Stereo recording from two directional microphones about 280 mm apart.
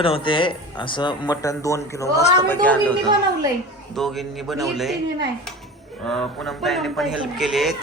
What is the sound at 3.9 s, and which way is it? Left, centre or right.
Speech, centre.